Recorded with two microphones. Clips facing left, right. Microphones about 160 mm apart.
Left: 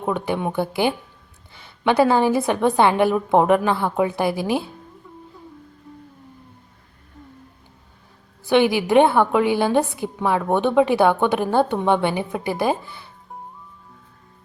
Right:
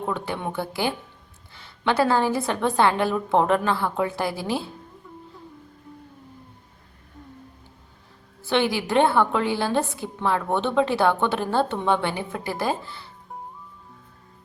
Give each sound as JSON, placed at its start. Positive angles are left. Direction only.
{"t": 0.0, "sound": "a woman's voice", "side_deg": 15}
{"t": 8.4, "sound": "a woman's voice", "side_deg": 15}